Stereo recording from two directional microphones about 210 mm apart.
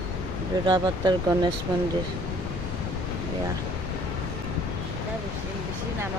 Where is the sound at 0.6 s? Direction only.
20° right (ahead or behind).